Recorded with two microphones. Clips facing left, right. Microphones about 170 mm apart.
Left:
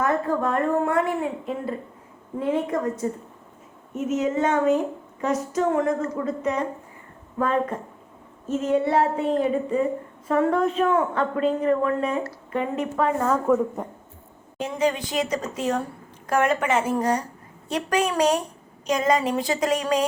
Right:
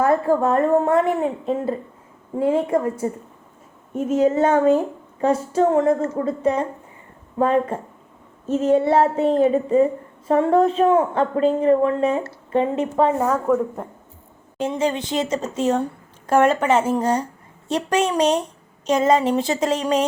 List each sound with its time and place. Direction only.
0.0 s a woman's voice: 30° right (ahead or behind)
13.5 s speech: centre (ahead or behind)
14.6 s a woman's voice: 30° right (ahead or behind)